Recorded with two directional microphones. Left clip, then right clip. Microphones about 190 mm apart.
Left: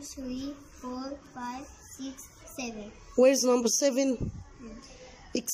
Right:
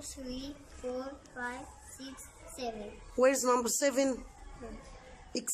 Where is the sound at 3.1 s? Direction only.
15° left (ahead or behind).